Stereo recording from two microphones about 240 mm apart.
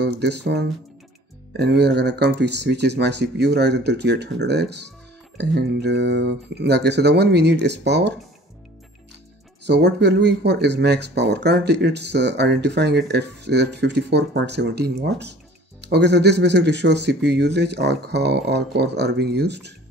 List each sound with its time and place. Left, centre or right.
0.0 s speech: right
9.7 s speech: right